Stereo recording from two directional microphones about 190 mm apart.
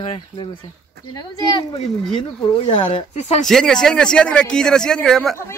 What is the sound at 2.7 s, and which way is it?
Speech, 35° left (ahead or behind).